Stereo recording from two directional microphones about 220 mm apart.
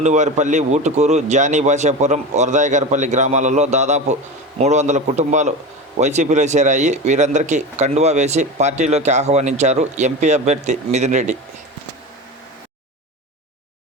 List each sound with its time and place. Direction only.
0.0 s speech: 35° right (ahead or behind)